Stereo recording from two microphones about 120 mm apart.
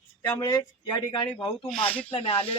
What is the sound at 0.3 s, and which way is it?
Speech, 35° left (ahead or behind).